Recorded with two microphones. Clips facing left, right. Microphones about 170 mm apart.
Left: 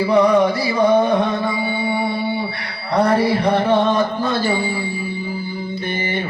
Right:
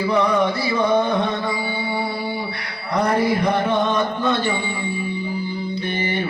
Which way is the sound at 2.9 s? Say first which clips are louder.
Left 3 dB; 30° left (ahead or behind).